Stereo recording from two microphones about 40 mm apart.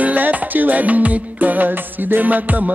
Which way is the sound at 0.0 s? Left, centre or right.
Right.